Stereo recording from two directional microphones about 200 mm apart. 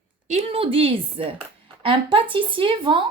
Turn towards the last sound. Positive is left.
turn(degrees=-25)  # may be behind; listen again after turning